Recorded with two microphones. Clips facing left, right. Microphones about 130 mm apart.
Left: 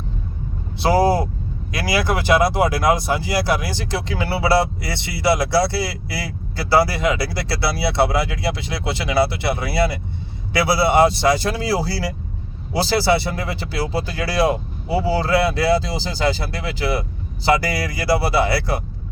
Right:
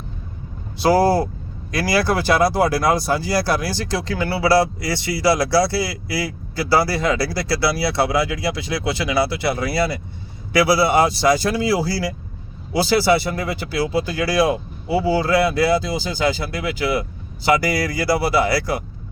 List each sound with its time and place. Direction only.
0.8 s speech: 25° left (ahead or behind)